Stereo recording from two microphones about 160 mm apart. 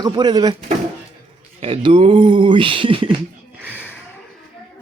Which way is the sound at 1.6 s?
35° right (ahead or behind).